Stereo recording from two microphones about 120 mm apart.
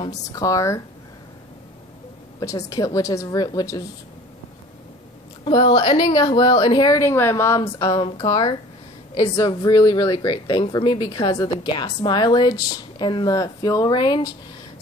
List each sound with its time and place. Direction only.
0.1 s a woman's voice: 30° left (ahead or behind)
2.4 s a woman's voice: 30° left (ahead or behind)
5.4 s a woman's voice: 45° left (ahead or behind)